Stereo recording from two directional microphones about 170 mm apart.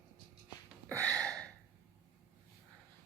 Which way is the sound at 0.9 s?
10° left (ahead or behind).